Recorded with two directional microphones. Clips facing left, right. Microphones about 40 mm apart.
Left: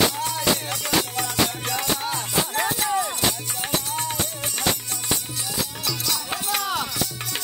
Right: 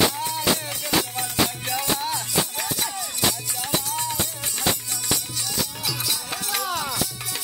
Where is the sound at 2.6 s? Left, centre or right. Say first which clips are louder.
Left 6 dB; left.